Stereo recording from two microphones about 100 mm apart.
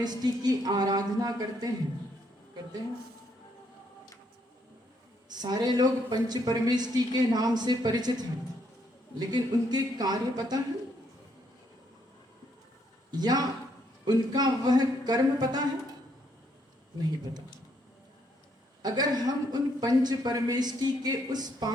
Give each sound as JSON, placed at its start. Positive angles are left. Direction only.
{"t": 0.0, "sound": "speech", "side_deg": -45}
{"t": 5.3, "sound": "speech", "side_deg": -45}
{"t": 13.1, "sound": "speech", "side_deg": -45}
{"t": 18.8, "sound": "speech", "side_deg": -40}